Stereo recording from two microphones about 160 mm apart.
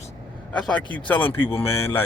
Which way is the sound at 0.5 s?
5° left (ahead or behind).